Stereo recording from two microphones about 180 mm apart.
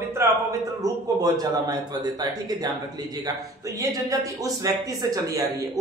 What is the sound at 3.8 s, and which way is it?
Speech, 20° right (ahead or behind).